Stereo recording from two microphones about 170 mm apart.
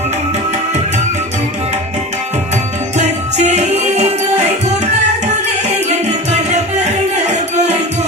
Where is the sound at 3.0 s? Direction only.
40° right (ahead or behind).